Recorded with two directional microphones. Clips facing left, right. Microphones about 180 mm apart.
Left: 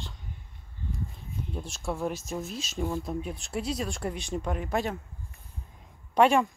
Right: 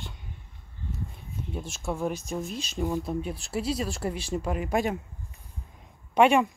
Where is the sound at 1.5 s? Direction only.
Centre (ahead or behind).